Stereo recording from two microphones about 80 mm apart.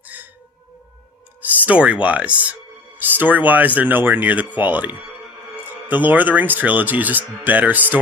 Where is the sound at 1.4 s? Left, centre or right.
Centre.